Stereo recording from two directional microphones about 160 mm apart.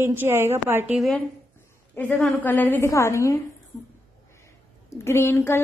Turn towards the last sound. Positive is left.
turn(degrees=15)  # may be behind; listen again after turning